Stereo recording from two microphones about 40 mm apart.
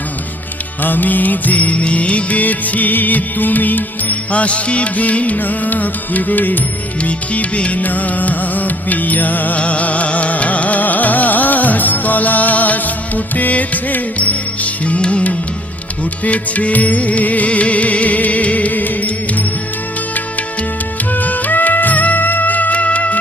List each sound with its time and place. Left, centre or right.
0.8 s music: left
7.0 s music: left
9.6 s music: left
21.1 s music: left